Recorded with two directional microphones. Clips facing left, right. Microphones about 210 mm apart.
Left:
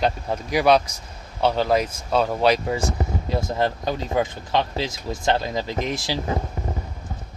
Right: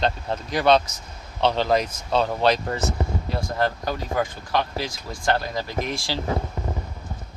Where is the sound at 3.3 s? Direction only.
20° left (ahead or behind).